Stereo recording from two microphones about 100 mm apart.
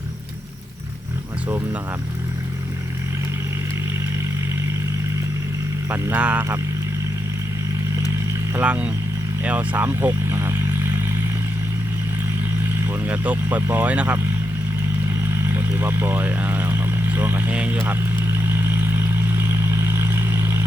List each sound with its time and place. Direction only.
5.9 s speech: 15° right (ahead or behind)
8.6 s speech: 15° right (ahead or behind)
12.8 s speech: 20° right (ahead or behind)
15.5 s speech: 20° right (ahead or behind)
18.4 s vehicle: 20° right (ahead or behind)